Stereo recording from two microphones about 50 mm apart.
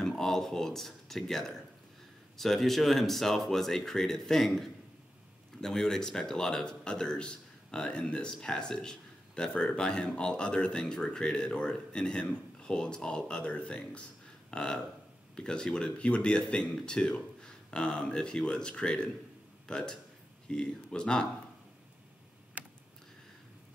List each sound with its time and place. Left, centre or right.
0.0 s a man's voice: centre
14.5 s a sound: centre
15.3 s a man's voice: centre
22.6 s computer keyboard: right